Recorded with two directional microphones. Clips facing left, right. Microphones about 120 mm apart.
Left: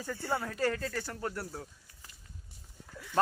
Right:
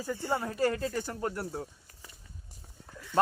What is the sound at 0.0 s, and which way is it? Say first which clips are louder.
A man's voice: right 3 dB; 15° right (ahead or behind).